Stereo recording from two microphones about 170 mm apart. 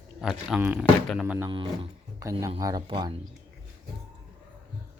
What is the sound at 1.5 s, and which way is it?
Speech, 30° right (ahead or behind).